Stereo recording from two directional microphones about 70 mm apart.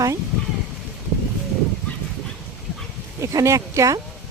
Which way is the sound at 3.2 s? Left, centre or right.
Right.